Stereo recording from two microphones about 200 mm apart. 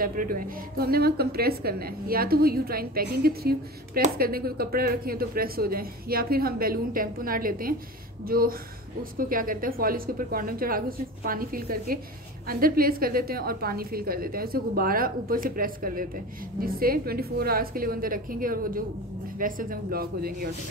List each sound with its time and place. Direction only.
0.0 s a woman's voice: 45° right (ahead or behind)